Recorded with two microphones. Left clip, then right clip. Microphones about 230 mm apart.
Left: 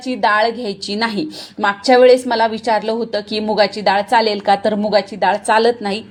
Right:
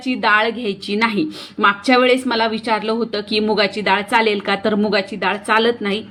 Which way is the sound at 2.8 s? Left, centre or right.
Centre.